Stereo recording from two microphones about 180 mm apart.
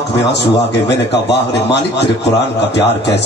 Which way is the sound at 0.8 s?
70° left (ahead or behind).